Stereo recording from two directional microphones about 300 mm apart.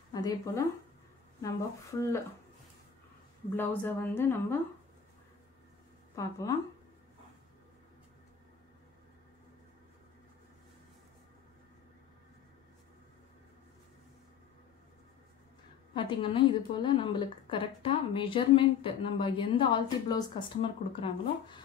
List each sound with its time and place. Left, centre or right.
0.1 s a woman's voice: centre
3.5 s a woman's voice: centre
6.1 s a woman's voice: centre
15.9 s a woman's voice: centre